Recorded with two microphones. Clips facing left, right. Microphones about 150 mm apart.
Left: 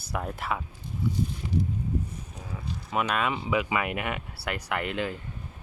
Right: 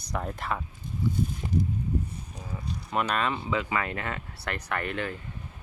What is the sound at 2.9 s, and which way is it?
Speech, 5° left (ahead or behind).